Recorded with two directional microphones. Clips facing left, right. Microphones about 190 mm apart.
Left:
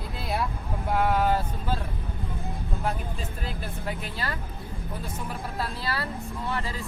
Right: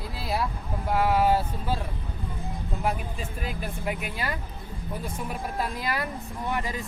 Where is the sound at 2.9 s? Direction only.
10° right (ahead or behind).